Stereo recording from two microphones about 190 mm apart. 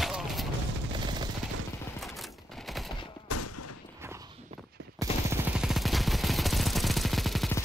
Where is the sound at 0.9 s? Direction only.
25° right (ahead or behind).